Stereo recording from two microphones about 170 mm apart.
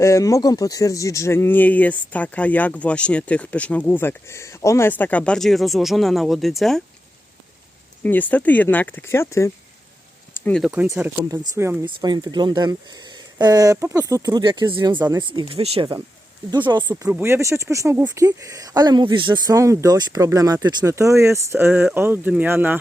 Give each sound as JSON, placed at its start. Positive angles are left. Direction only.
{"t": 0.0, "sound": "speech", "side_deg": 15}
{"t": 8.0, "sound": "speech", "side_deg": 10}
{"t": 10.6, "sound": "speech", "side_deg": -10}
{"t": 11.9, "sound": "speech", "side_deg": -25}
{"t": 14.9, "sound": "speech", "side_deg": -10}
{"t": 15.2, "sound": "speech", "side_deg": -30}
{"t": 16.9, "sound": "speech", "side_deg": -15}